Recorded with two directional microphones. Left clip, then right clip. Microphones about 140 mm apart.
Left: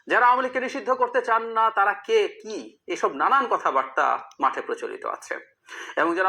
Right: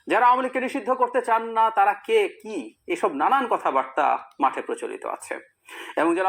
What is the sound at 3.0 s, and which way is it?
Speech, 35° left (ahead or behind).